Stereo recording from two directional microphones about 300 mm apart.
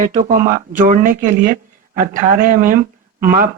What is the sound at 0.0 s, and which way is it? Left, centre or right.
Speech, right.